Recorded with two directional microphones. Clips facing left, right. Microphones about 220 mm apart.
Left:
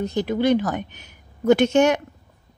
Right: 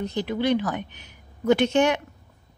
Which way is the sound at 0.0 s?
45° left (ahead or behind).